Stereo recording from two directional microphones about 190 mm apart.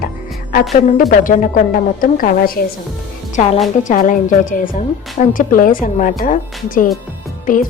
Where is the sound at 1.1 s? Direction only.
40° left (ahead or behind).